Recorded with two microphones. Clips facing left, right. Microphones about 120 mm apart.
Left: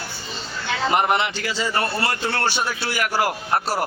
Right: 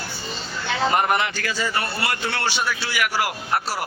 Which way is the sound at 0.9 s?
20° left (ahead or behind).